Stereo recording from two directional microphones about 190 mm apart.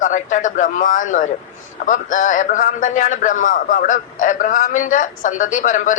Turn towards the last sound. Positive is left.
turn(degrees=40)  # may be behind; listen again after turning